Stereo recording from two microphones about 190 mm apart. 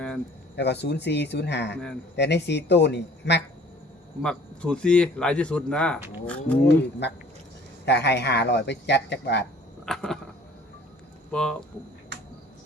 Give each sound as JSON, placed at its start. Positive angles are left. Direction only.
{"t": 0.5, "sound": "speech", "side_deg": 65}
{"t": 4.2, "sound": "speech", "side_deg": 5}
{"t": 7.9, "sound": "speech", "side_deg": 60}
{"t": 9.8, "sound": "a sound", "side_deg": 0}
{"t": 11.3, "sound": "speech", "side_deg": 5}